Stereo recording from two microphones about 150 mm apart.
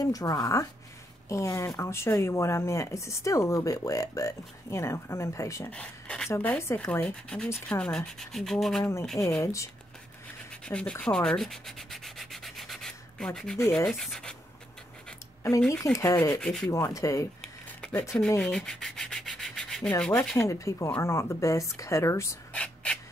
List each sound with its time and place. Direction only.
0.0 s speech: 25° left (ahead or behind)
5.7 s speech: 5° left (ahead or behind)
9.2 s speech: 20° left (ahead or behind)
10.6 s sanding: 5° left (ahead or behind)
13.6 s speech: 15° left (ahead or behind)
13.8 s speech: centre (ahead or behind)
15.7 s speech: 20° left (ahead or behind)
16.3 s speech: 5° left (ahead or behind)
16.7 s speech: 20° left (ahead or behind)
18.4 s sanding: 5° left (ahead or behind)
20.0 s speech: 5° left (ahead or behind)
22.5 s a sound: 10° left (ahead or behind)